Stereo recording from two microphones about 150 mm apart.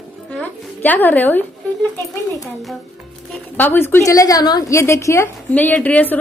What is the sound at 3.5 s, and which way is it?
A woman's voice, 10° left (ahead or behind).